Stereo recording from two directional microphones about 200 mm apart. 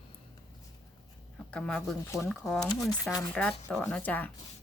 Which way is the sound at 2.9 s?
20° left (ahead or behind).